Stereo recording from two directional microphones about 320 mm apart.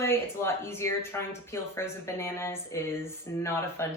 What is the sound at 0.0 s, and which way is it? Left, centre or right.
Speech, centre.